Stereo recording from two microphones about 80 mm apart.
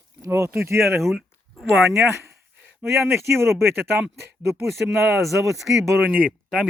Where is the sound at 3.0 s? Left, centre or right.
Right.